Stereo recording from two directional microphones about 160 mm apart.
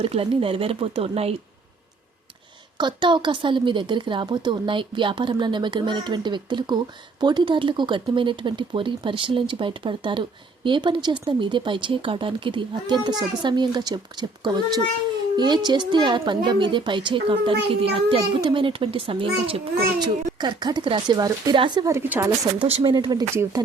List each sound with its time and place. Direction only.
0.0 s speech: 35° right (ahead or behind)
2.7 s a woman's voice: 30° right (ahead or behind)
22.6 s a woman's voice: 35° right (ahead or behind)
23.3 s speech: 15° right (ahead or behind)